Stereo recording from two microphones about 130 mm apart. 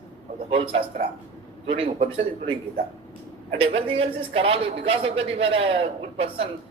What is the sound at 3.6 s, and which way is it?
Speech, 45° right (ahead or behind).